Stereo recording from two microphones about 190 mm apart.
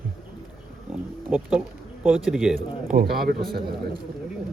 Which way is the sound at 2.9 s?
50° right (ahead or behind).